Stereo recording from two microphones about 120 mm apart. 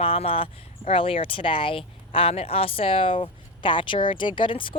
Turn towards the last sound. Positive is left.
turn(degrees=45)  # may be behind; listen again after turning